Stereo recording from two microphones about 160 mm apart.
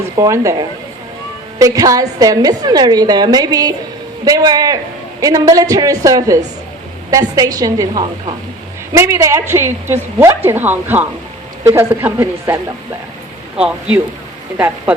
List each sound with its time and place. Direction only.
0.2 s a woman's voice: 20° right (ahead or behind)
1.5 s a woman's voice: 20° right (ahead or behind)
13.6 s a woman's voice: 5° right (ahead or behind)